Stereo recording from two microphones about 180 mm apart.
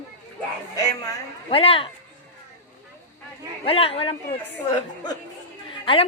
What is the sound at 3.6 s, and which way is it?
Speech, 30° left (ahead or behind).